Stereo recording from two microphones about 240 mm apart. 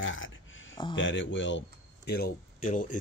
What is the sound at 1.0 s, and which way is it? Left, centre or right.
Speech, left.